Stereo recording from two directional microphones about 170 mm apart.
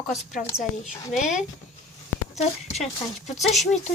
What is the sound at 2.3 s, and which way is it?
Speech, 40° left (ahead or behind).